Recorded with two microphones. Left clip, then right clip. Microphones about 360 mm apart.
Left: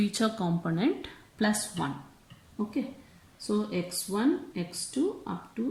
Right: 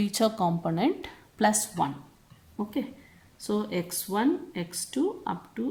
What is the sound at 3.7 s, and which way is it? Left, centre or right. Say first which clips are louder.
Speech: right 1 dB; centre.